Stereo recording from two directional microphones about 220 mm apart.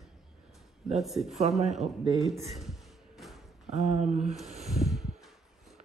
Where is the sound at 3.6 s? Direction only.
30° right (ahead or behind).